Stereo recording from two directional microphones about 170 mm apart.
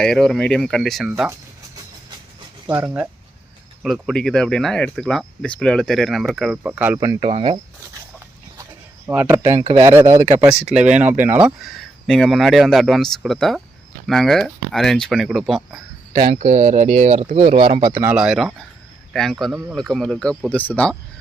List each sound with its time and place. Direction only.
0.0 s speech: 5° left (ahead or behind)
2.6 s speech: 10° right (ahead or behind)
3.8 s speech: centre (ahead or behind); by 7.3 s 20° right (ahead or behind)
7.3 s speech: 35° right (ahead or behind)
9.0 s speech: 15° right (ahead or behind)
10.7 s speech: 5° right (ahead or behind)
16.2 s speech: 40° right (ahead or behind); by 17.9 s 25° right (ahead or behind)
17.9 s speech: 10° right (ahead or behind); by 20.9 s 10° left (ahead or behind)